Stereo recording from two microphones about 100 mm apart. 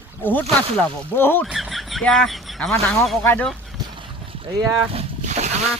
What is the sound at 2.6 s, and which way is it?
Speech, 5° left (ahead or behind).